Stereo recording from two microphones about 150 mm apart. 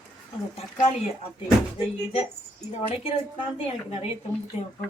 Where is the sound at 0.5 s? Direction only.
45° left (ahead or behind).